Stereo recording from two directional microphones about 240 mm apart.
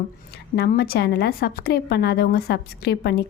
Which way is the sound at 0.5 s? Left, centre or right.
Left.